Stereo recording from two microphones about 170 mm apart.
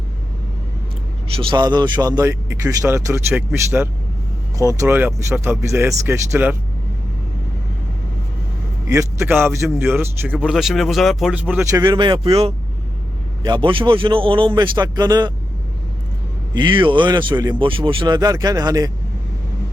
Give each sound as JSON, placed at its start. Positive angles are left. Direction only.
{"t": 1.4, "sound": "a man's voice", "side_deg": -30}
{"t": 8.9, "sound": "a man's voice", "side_deg": -15}
{"t": 16.6, "sound": "speech", "side_deg": -25}